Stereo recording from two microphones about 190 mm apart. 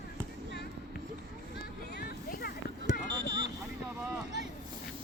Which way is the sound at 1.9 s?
55° left (ahead or behind).